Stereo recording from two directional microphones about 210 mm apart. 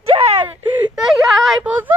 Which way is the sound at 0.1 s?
25° right (ahead or behind).